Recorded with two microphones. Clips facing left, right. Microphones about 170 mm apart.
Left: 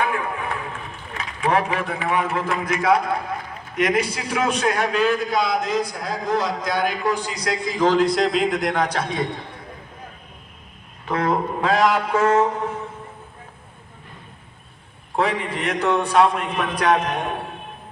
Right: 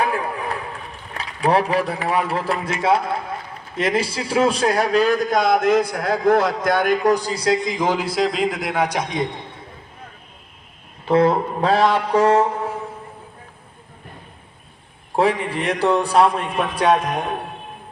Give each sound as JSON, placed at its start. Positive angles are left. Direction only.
{"t": 0.0, "sound": "run", "side_deg": -35}
{"t": 3.8, "sound": "a man's voice", "side_deg": -30}
{"t": 7.5, "sound": "a man's voice", "side_deg": -20}
{"t": 11.1, "sound": "a man's voice", "side_deg": -30}
{"t": 15.1, "sound": "a man's voice", "side_deg": -30}